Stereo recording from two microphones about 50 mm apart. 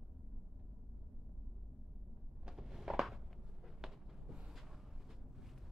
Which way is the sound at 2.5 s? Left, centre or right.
Centre.